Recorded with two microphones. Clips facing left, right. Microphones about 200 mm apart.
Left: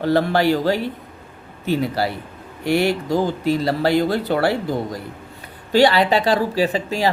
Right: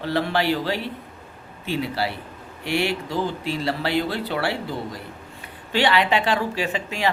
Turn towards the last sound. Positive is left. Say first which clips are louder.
# left 6 dB
turn(degrees=35)  # may be behind; listen again after turning